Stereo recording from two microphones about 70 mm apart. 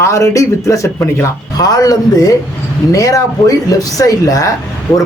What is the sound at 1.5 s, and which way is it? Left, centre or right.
Speech, left.